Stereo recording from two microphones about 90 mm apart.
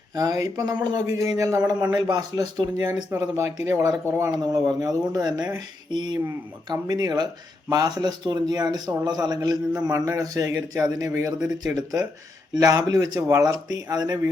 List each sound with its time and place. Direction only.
0.1 s a man's voice: 45° right (ahead or behind)
1.0 s a man's voice: 40° right (ahead or behind)
2.8 s speech: 30° right (ahead or behind)
4.8 s a man's voice: 45° right (ahead or behind)
6.1 s a man's voice: 40° right (ahead or behind)